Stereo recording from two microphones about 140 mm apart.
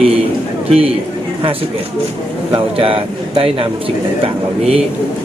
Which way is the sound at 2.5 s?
40° right (ahead or behind).